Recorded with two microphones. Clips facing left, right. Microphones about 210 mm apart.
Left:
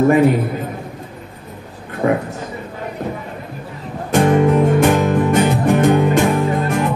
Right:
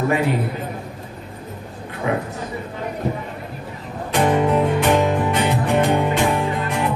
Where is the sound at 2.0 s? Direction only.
45° left (ahead or behind).